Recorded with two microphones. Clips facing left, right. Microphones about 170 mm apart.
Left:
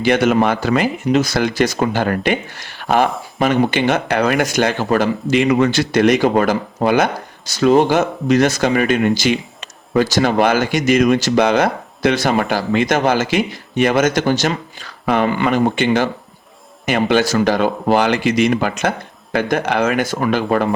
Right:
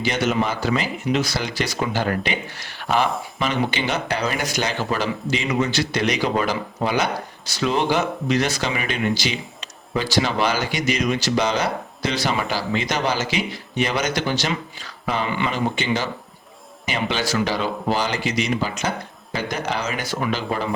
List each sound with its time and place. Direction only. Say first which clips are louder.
0.0 s speech: left 8 dB; 55° left (ahead or behind)
15.0 s speech: left 8 dB; 60° left (ahead or behind)
15.3 s speech: left 7 dB; 50° left (ahead or behind)